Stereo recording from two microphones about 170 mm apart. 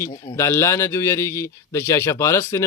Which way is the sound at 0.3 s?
15° left (ahead or behind).